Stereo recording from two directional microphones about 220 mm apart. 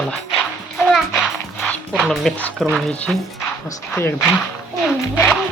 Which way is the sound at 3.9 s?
10° left (ahead or behind).